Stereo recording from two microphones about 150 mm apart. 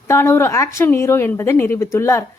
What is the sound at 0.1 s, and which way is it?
A woman's voice, 20° left (ahead or behind).